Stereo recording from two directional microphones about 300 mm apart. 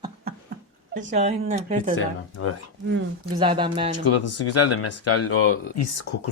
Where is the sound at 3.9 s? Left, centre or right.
Left.